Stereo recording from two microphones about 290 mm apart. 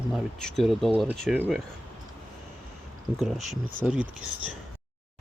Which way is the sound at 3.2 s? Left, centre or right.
Centre.